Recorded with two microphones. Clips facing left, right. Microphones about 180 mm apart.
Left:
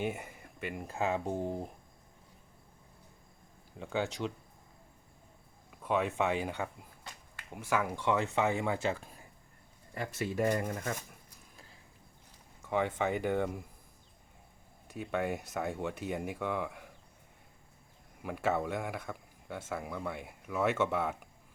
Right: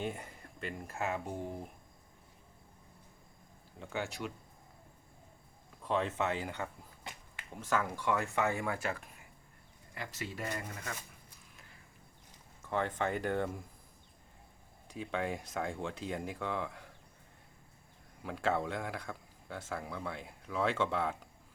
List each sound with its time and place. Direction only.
0.0 s a sound: 10° left (ahead or behind)
1.1 s speech: 30° left (ahead or behind)
3.8 s speech: 20° left (ahead or behind)
5.8 s a man's voice: 10° left (ahead or behind); by 9.2 s 25° left (ahead or behind)
9.9 s speech: 50° left (ahead or behind)
12.7 s a man's voice: 10° left (ahead or behind)
14.8 s a man's voice: 5° left (ahead or behind)
18.2 s a man's voice: 10° left (ahead or behind)